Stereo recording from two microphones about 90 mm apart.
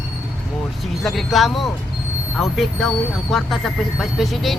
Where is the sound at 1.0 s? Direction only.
Centre (ahead or behind).